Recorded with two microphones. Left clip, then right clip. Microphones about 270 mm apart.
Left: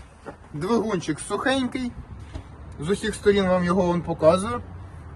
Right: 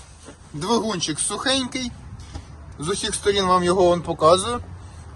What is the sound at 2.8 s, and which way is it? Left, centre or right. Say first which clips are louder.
Speech: left 1 dB; centre.